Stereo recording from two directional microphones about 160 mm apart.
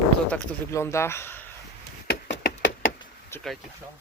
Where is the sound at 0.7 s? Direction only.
15° left (ahead or behind).